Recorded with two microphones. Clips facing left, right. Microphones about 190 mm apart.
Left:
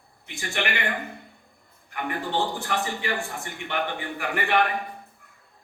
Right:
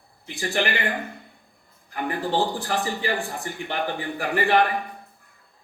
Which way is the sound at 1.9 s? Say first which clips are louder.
Right 3 dB; 35° right (ahead or behind).